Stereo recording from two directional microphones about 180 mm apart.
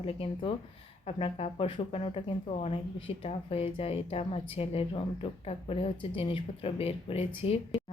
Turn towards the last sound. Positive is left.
turn(degrees=30)  # may be behind; listen again after turning